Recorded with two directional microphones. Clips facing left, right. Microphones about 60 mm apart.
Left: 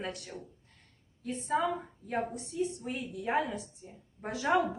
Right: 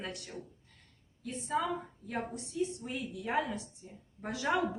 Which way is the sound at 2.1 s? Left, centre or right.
Left.